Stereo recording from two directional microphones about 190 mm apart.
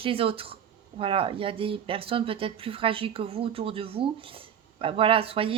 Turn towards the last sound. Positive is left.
turn(degrees=-30)  # may be behind; listen again after turning